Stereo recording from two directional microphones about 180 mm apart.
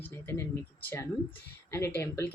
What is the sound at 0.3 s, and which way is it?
Speech, 10° left (ahead or behind).